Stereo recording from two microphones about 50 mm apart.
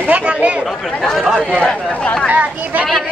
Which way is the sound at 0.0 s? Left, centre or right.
Right.